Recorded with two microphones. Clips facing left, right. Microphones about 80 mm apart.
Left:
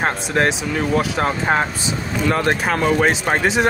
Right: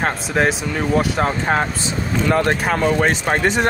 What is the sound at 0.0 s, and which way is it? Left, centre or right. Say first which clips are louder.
Speech: even; centre.